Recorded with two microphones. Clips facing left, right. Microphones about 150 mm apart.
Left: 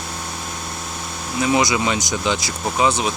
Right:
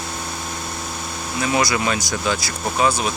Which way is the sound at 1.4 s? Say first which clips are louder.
Left 2 dB; 20° left (ahead or behind).